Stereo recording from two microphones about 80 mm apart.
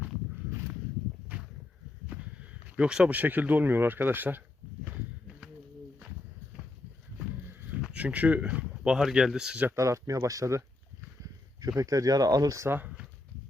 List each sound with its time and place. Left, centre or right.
2.0 s speech: centre
7.8 s speech: centre
9.7 s speech: right
11.8 s speech: right
12.6 s speech: right